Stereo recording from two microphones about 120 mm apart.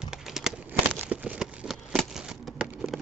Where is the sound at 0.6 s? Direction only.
15° right (ahead or behind).